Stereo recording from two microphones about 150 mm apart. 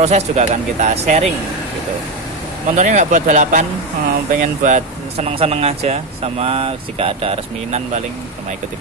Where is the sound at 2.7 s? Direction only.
50° right (ahead or behind).